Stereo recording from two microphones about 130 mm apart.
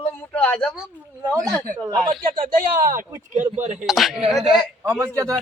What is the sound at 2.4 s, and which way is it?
Speech, 90° right.